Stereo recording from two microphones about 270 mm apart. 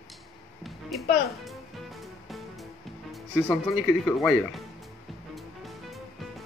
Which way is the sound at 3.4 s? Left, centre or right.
Centre.